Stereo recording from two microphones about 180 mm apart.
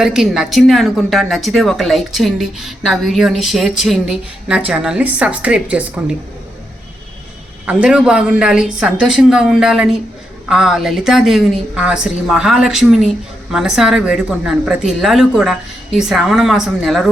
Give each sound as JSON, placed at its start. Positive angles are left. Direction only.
{"t": 0.0, "sound": "speech", "side_deg": 0}
{"t": 7.7, "sound": "speech", "side_deg": -5}